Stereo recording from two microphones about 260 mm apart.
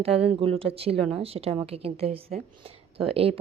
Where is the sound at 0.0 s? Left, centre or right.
Right.